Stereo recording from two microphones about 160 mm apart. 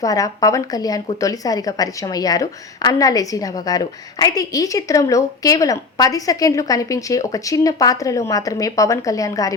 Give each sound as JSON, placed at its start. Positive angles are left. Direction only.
{"t": 0.0, "sound": "a woman's voice", "side_deg": 20}